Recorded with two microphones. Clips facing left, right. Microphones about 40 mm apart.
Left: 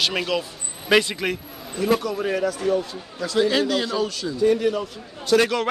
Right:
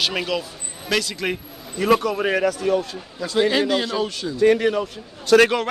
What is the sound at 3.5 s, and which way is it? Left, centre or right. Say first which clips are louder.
Speech: right 1 dB; centre.